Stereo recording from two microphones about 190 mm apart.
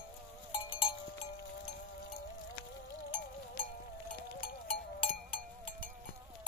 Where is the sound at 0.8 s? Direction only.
35° left (ahead or behind).